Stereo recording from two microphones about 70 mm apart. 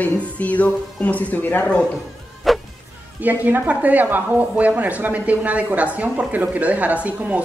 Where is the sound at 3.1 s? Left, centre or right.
Right.